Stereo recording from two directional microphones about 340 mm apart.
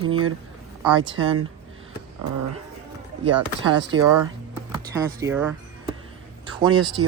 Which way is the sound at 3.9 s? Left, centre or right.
Right.